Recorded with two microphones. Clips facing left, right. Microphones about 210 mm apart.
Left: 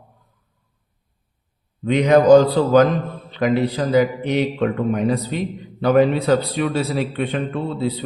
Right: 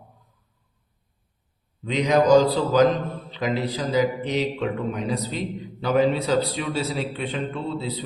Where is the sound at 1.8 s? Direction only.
55° left (ahead or behind).